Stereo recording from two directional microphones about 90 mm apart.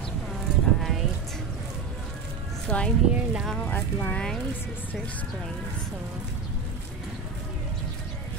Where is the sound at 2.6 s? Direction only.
15° left (ahead or behind).